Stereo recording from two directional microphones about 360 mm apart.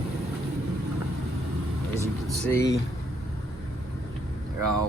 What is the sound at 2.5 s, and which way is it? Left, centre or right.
Speech, centre.